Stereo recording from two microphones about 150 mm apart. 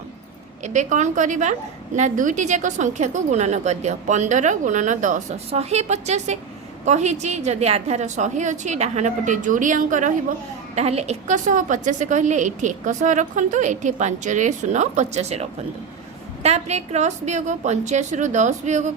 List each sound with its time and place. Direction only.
0.6 s a woman's voice: 55° right (ahead or behind)
10.8 s a woman's voice: 45° right (ahead or behind)